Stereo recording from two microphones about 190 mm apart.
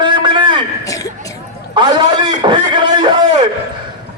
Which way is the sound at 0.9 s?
15° left (ahead or behind).